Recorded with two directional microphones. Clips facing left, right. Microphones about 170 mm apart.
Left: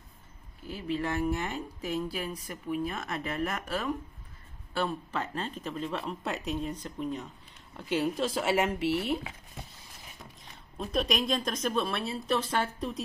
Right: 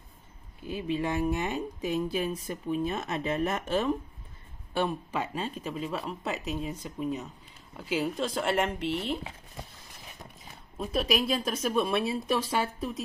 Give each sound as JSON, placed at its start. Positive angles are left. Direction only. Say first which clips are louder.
{"t": 0.7, "sound": "speech", "louder": "right 2 dB", "side_deg": -15}
{"t": 10.4, "sound": "speech", "louder": "right 2 dB", "side_deg": -5}